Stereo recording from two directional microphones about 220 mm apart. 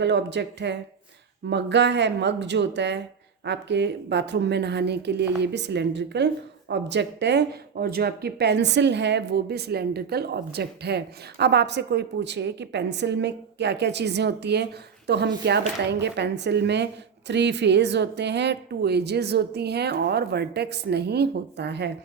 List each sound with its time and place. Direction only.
0.0 s speech: 50° right (ahead or behind)